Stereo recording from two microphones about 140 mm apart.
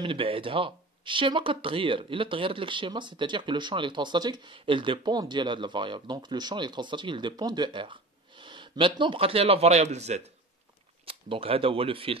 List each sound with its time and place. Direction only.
0.0 s speech: 40° right (ahead or behind)
11.1 s speech: 40° right (ahead or behind)